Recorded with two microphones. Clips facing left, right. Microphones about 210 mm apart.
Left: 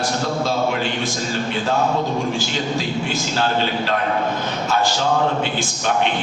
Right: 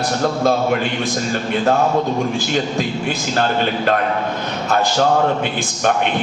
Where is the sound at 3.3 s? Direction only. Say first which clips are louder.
Right 2 dB; 50° right (ahead or behind).